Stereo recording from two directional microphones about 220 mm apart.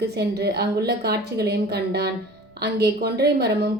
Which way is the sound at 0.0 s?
50° right (ahead or behind).